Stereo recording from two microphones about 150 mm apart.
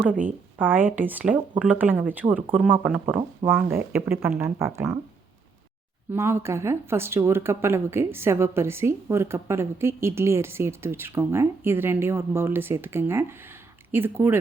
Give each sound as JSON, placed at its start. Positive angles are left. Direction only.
{"t": 0.6, "sound": "speech", "side_deg": -10}
{"t": 6.1, "sound": "speech", "side_deg": -15}